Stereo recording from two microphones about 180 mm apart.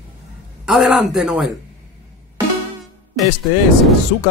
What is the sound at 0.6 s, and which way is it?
Speech, centre (ahead or behind).